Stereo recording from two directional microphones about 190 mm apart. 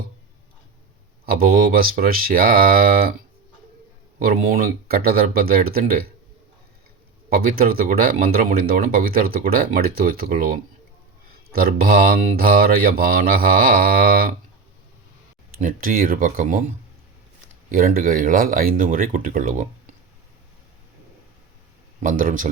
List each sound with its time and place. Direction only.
1.2 s speech: 50° right (ahead or behind)
4.2 s speech: 50° right (ahead or behind)
7.3 s speech: 50° right (ahead or behind)
15.5 s speech: 50° right (ahead or behind)
17.7 s speech: 50° right (ahead or behind)
22.0 s speech: 45° right (ahead or behind)